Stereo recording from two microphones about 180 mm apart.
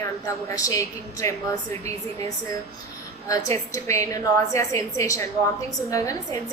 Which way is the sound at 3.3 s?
15° left (ahead or behind).